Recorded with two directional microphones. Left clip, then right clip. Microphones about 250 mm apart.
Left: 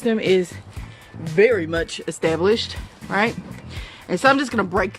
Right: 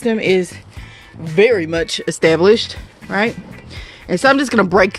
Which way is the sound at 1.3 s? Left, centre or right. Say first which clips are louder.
Right 4 dB; right.